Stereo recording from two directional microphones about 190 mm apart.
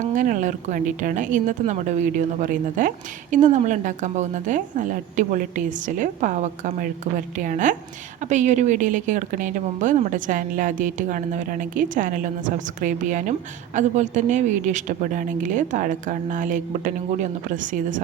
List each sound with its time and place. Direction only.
0.0 s a woman's voice: 40° right (ahead or behind)